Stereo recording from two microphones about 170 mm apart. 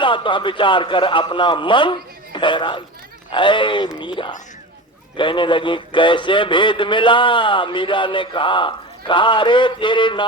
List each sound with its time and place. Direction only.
0.0 s speech: 30° left (ahead or behind)